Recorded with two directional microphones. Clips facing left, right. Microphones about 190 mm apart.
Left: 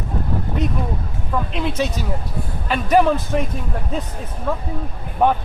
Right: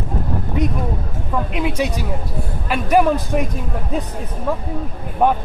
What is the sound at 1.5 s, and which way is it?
Speech, 10° right (ahead or behind).